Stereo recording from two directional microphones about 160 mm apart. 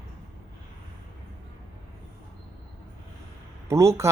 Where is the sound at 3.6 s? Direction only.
20° right (ahead or behind).